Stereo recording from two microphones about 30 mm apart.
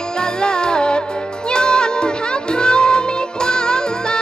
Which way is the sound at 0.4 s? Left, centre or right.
Left.